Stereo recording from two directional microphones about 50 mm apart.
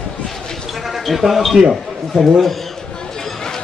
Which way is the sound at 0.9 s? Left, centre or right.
Centre.